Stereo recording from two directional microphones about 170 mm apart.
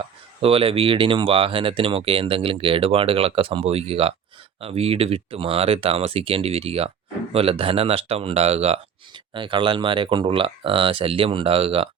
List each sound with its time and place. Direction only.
0.4 s speech: 35° right (ahead or behind)